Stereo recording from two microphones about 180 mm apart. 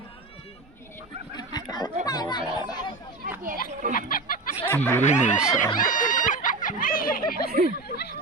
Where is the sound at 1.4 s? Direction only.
25° left (ahead or behind).